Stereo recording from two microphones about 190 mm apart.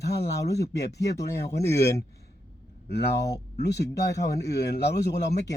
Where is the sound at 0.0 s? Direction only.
60° left (ahead or behind).